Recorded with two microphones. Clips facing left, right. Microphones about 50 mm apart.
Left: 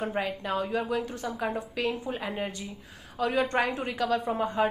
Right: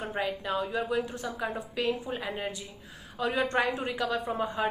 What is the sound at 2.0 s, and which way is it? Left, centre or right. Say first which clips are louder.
Speech: left 2 dB; centre.